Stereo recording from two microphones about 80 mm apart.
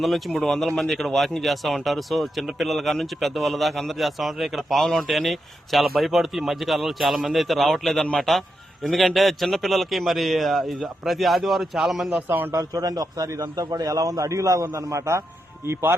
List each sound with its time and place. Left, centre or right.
0.0 s speech: centre
12.1 s speech: right
12.5 s a man's voice: right